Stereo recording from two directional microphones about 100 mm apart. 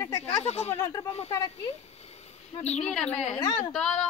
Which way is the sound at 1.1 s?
90° left.